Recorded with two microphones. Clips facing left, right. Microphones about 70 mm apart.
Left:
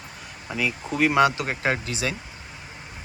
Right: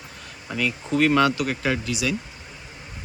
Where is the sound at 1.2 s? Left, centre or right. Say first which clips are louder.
Even; left.